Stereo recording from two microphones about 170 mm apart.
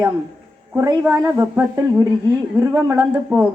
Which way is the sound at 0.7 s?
15° right (ahead or behind).